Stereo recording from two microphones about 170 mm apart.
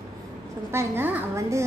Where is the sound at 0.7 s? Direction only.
15° right (ahead or behind).